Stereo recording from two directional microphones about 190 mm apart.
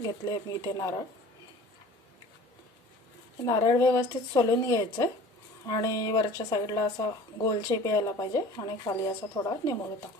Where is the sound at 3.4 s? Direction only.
20° left (ahead or behind).